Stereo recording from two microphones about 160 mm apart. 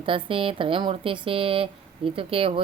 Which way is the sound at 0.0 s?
35° right (ahead or behind).